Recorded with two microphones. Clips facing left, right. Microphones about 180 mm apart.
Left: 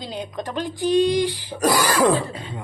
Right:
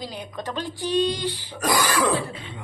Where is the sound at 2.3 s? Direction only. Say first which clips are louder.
Left 4 dB; 40° left (ahead or behind).